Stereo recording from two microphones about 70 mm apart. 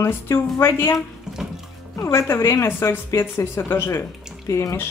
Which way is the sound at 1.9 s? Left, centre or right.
Left.